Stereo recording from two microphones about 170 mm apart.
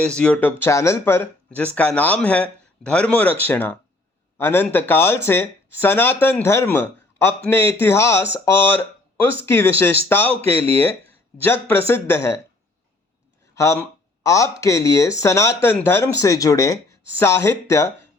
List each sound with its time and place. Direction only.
0.0 s speech: 5° left (ahead or behind)
11.4 s speech: 15° left (ahead or behind)
13.6 s speech: 15° left (ahead or behind)